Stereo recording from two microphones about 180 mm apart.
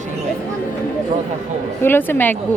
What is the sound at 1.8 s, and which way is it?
Speech, 10° left (ahead or behind).